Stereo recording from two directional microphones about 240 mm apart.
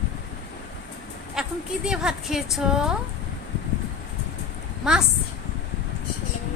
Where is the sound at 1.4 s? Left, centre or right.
Centre.